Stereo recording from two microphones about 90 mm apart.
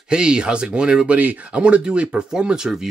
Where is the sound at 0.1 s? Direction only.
10° right (ahead or behind).